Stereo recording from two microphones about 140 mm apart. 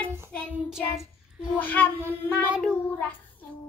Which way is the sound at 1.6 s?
15° left (ahead or behind).